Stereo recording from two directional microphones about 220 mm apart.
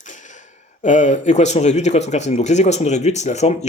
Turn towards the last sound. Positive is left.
turn(degrees=30)  # may be behind; listen again after turning